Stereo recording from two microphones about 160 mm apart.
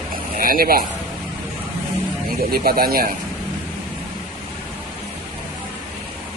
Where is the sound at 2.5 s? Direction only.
70° right (ahead or behind).